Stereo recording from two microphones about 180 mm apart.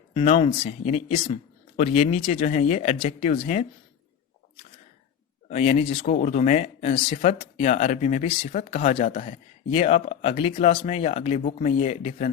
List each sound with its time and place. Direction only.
0.1 s speech: 30° left (ahead or behind)
5.5 s speech: 40° left (ahead or behind)